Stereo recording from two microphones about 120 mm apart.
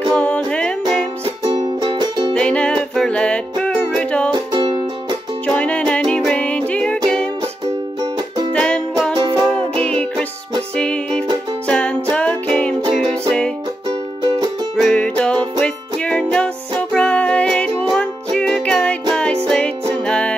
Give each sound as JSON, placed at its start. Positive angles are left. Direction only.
{"t": 0.1, "sound": "music", "side_deg": 10}
{"t": 1.4, "sound": "music", "side_deg": -35}
{"t": 2.3, "sound": "music", "side_deg": 10}
{"t": 4.3, "sound": "music", "side_deg": -40}
{"t": 5.5, "sound": "music", "side_deg": 10}
{"t": 8.5, "sound": "music", "side_deg": 10}
{"t": 13.8, "sound": "music", "side_deg": -35}
{"t": 14.8, "sound": "music", "side_deg": 10}